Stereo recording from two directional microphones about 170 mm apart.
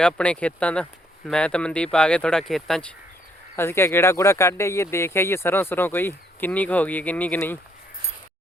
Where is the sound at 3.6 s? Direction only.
15° left (ahead or behind).